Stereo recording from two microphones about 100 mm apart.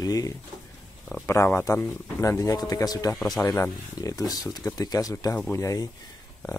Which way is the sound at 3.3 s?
25° left (ahead or behind).